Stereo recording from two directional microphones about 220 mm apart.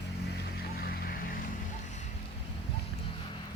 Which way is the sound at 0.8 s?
45° left (ahead or behind).